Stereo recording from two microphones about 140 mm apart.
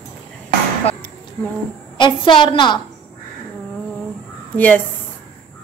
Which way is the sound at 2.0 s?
35° left (ahead or behind).